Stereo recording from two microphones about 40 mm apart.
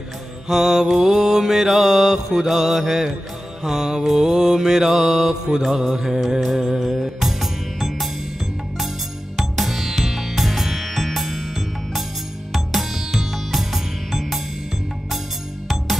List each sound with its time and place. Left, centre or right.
0.5 s mantra: centre
5.9 s mantra: centre
6.4 s music: centre
9.4 s music: centre